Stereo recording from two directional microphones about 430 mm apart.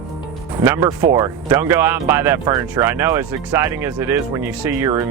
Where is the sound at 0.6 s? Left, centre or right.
Centre.